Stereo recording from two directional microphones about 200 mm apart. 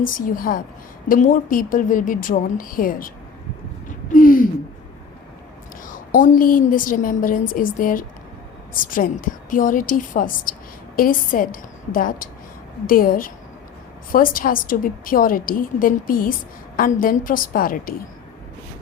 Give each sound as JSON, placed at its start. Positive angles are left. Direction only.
{"t": 0.0, "sound": "a woman's voice", "side_deg": 45}
{"t": 3.8, "sound": "a sound", "side_deg": 45}
{"t": 5.8, "sound": "a woman's voice", "side_deg": 40}